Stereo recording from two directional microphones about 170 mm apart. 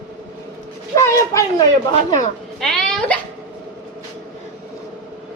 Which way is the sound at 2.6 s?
Centre (ahead or behind).